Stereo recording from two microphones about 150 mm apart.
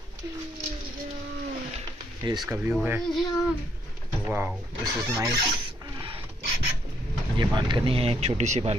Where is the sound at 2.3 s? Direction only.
30° right (ahead or behind).